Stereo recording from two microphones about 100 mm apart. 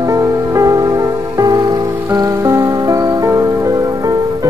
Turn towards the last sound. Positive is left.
turn(degrees=-30)  # may be behind; listen again after turning